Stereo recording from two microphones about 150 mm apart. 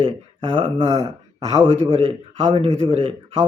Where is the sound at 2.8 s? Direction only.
40° right (ahead or behind).